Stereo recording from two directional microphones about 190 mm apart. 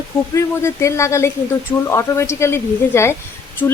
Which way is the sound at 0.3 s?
15° left (ahead or behind).